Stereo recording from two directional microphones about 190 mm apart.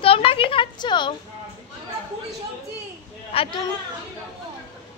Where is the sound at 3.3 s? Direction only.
30° left (ahead or behind).